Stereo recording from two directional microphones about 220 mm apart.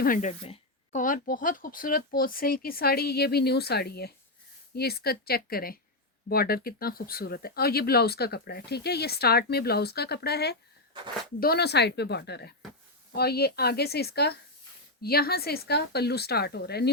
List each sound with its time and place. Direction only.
0.0 s speech: 35° left (ahead or behind)